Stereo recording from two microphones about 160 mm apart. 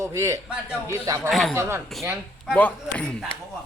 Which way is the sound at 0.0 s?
20° right (ahead or behind).